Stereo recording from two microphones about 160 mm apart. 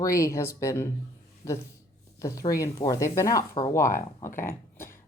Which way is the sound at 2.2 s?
20° left (ahead or behind).